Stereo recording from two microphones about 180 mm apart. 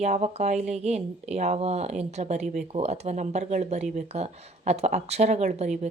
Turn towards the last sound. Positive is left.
turn(degrees=-40)  # may be behind; listen again after turning